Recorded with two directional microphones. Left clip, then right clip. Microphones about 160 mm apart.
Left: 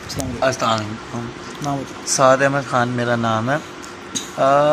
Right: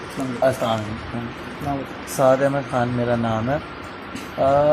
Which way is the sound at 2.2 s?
10° left (ahead or behind).